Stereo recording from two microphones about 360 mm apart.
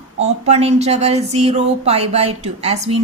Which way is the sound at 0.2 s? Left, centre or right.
Centre.